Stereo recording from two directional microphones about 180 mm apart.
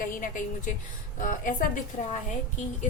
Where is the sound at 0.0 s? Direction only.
45° left (ahead or behind).